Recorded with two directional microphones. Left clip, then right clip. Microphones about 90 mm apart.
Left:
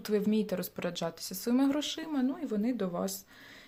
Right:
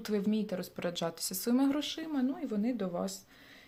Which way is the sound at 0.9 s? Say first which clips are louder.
Even; centre (ahead or behind).